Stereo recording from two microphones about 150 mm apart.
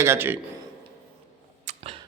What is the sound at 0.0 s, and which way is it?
Speech, 15° right (ahead or behind).